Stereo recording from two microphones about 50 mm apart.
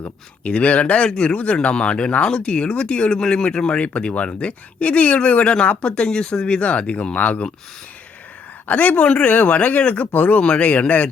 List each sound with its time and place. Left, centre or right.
0.0 s speech: left
8.6 s speech: left